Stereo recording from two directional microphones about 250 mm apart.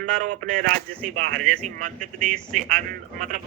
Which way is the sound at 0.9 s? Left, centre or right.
Centre.